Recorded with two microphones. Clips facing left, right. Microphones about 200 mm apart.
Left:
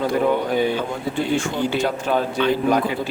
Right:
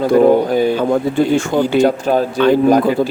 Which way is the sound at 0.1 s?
40° right (ahead or behind).